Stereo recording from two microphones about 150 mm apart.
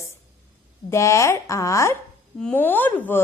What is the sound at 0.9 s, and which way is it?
A woman's voice, 20° left (ahead or behind).